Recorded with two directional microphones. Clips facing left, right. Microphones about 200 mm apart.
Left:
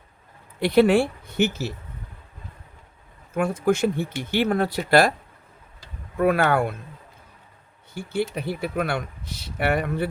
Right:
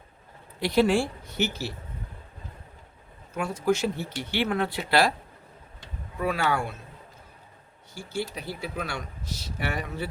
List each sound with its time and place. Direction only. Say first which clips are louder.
0.6 s speech: left 5 dB; 60° left (ahead or behind)
3.3 s speech: left 4 dB; 55° left (ahead or behind)
6.1 s speech: left 7 dB; 55° left (ahead or behind)
8.4 s speech: left 7 dB; 60° left (ahead or behind)